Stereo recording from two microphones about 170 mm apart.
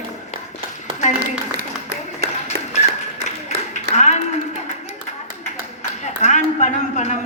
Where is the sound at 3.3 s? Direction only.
45° left (ahead or behind).